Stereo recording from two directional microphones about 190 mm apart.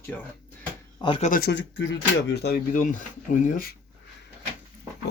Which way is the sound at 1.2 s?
50° left (ahead or behind).